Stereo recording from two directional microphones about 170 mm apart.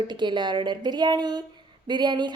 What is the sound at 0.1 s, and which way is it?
A woman's voice, 25° right (ahead or behind).